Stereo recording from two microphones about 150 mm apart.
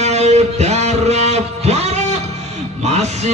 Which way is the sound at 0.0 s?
45° right (ahead or behind).